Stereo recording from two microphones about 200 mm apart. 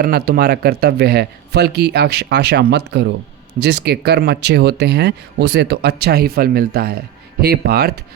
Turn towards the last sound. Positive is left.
turn(degrees=-50)  # may be behind; listen again after turning